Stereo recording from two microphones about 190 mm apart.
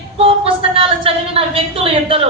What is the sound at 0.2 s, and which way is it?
A woman's voice, 30° right (ahead or behind).